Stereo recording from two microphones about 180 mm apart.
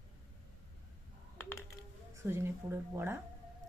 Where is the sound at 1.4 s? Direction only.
15° left (ahead or behind).